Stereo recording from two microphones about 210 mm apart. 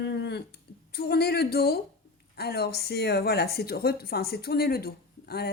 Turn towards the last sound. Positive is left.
turn(degrees=50)  # may be behind; listen again after turning